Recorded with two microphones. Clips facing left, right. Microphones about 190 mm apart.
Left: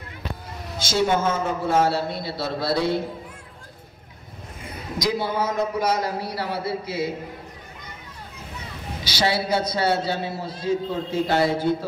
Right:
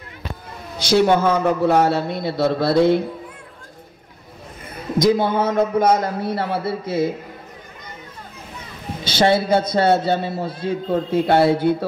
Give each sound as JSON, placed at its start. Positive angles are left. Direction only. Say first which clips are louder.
{"t": 0.7, "sound": "a man's voice", "louder": "right 6 dB", "side_deg": -65}
{"t": 4.9, "sound": "a man's voice", "louder": "right 8 dB", "side_deg": -50}
{"t": 9.0, "sound": "a man's voice", "louder": "right 7 dB", "side_deg": -50}